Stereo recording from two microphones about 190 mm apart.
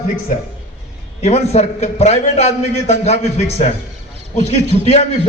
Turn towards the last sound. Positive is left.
turn(degrees=35)  # may be behind; listen again after turning